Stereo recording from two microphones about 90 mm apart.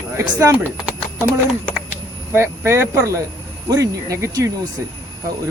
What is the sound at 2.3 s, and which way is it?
Speech, 30° right (ahead or behind).